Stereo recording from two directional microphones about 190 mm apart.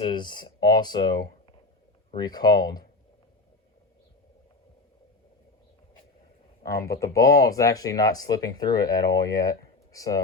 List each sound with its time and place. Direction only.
0.0 s speech: 25° left (ahead or behind)
6.6 s speech: 15° left (ahead or behind)